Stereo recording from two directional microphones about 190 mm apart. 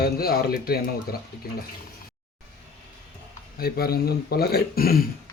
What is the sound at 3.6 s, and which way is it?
Speech, 55° left (ahead or behind).